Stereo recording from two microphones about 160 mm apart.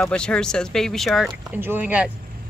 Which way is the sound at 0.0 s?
5° left (ahead or behind).